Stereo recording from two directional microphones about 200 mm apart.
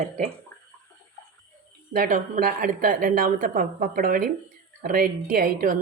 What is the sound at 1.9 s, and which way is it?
A woman's voice, 40° right (ahead or behind).